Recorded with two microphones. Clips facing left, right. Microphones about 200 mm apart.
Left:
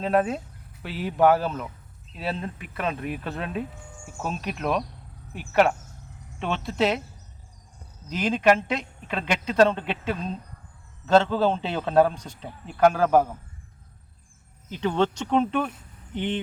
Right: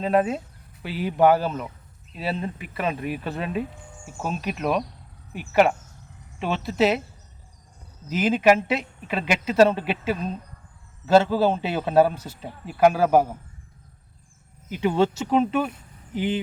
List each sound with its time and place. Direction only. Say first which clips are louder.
0.0 s speech: right 2 dB; centre (ahead or behind)
8.1 s a man's voice: right 2 dB; 5° right (ahead or behind)
14.7 s speech: right 3 dB; 10° right (ahead or behind)